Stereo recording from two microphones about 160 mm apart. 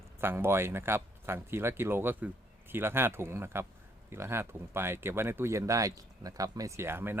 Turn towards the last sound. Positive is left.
turn(degrees=-15)  # may be behind; listen again after turning